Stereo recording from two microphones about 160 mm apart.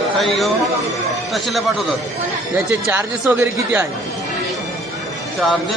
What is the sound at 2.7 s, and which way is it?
Speech, 15° right (ahead or behind).